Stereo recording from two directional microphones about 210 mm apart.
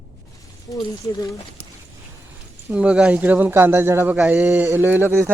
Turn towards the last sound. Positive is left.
turn(degrees=-10)  # may be behind; listen again after turning